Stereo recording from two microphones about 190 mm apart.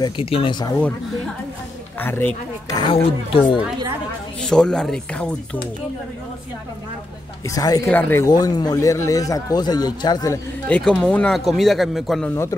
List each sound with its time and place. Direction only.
0.0 s speech: 30° left (ahead or behind)
2.0 s a man's voice: 10° left (ahead or behind)
2.8 s speech: 30° left (ahead or behind)
4.4 s speech: 5° left (ahead or behind)
7.4 s a man's voice: 20° left (ahead or behind)
10.7 s speech: 5° left (ahead or behind)